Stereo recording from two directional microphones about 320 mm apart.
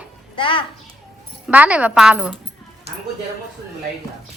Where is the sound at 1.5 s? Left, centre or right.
Centre.